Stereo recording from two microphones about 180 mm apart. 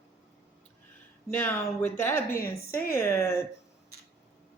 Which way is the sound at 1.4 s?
15° left (ahead or behind).